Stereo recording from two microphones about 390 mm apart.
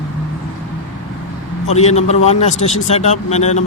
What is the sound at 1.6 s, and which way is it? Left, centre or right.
Speech, centre.